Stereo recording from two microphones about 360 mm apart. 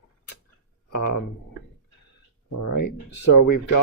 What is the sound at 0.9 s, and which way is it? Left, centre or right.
Speech, left.